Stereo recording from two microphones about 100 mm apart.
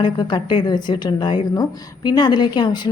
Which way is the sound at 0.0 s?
55° left (ahead or behind).